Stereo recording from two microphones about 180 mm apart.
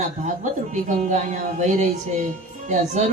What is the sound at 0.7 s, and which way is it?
Speech, 40° right (ahead or behind).